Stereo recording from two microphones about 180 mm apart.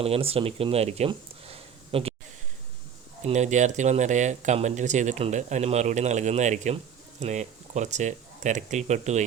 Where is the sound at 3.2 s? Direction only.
40° right (ahead or behind).